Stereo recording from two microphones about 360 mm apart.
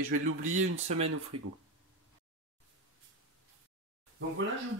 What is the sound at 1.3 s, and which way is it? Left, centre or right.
Speech, right.